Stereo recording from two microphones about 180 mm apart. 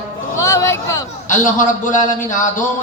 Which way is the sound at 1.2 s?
45° left (ahead or behind).